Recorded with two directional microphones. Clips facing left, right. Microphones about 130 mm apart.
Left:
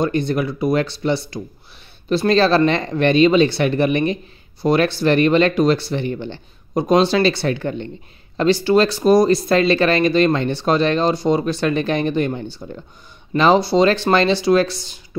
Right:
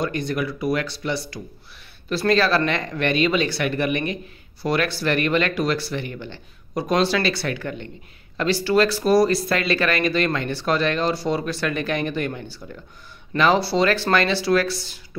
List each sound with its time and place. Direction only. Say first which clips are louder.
0.0 s speech: left 5 dB; 25° left (ahead or behind)